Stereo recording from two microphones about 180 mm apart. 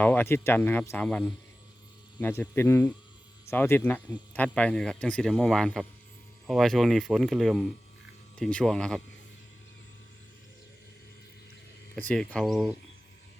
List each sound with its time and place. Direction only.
0.0 s a man's voice: 10° left (ahead or behind)
11.9 s a man's voice: 5° left (ahead or behind)